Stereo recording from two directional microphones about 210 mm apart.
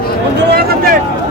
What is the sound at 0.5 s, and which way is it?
Speech, 45° right (ahead or behind).